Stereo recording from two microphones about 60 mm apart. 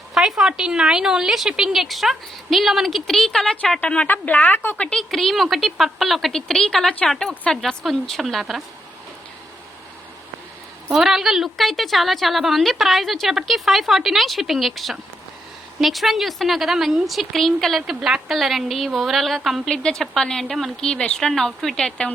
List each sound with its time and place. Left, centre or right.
0.1 s a woman's voice: centre
4.0 s a woman's voice: left
4.8 s a woman's voice: centre
5.1 s a woman's voice: centre
10.9 s a woman's voice: centre
17.8 s a woman's voice: centre
19.6 s a woman's voice: centre
20.9 s a woman's voice: centre